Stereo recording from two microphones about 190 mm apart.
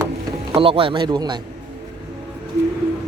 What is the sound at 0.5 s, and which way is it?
Speech, 30° right (ahead or behind).